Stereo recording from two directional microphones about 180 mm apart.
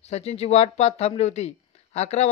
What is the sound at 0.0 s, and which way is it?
Speech, 35° left (ahead or behind).